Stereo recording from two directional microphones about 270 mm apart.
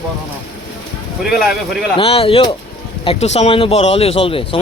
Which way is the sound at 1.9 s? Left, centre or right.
Left.